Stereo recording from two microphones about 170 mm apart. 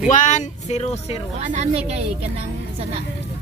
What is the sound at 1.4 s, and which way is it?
Speech, 45° right (ahead or behind).